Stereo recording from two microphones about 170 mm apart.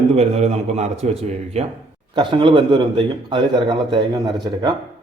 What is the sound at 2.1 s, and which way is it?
A man's voice, 25° right (ahead or behind).